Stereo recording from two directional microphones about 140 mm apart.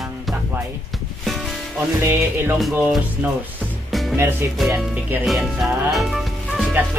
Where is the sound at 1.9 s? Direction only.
15° right (ahead or behind).